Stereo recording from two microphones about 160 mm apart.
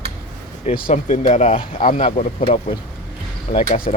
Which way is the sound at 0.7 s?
40° left (ahead or behind).